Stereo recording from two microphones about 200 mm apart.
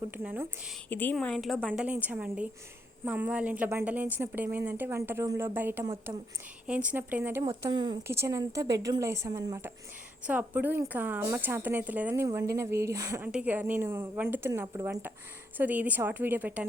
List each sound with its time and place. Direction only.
0.1 s speech: 10° right (ahead or behind)
0.9 s a woman's voice: 10° left (ahead or behind); by 7.4 s 10° right (ahead or behind)
7.6 s speech: 20° right (ahead or behind)